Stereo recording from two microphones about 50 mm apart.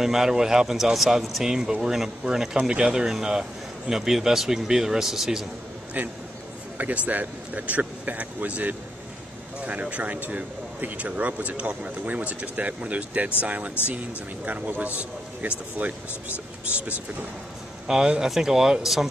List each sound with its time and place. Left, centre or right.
0.0 s speech: centre
6.0 s speech: right
17.8 s speech: centre